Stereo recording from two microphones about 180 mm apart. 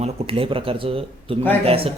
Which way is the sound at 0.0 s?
30° right (ahead or behind).